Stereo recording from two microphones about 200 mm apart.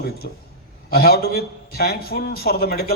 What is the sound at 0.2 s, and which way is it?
A man's voice, 50° left (ahead or behind).